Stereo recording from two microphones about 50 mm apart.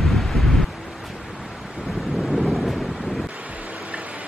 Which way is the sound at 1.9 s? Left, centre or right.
Centre.